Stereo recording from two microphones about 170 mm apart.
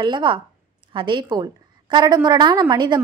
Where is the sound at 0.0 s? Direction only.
30° right (ahead or behind).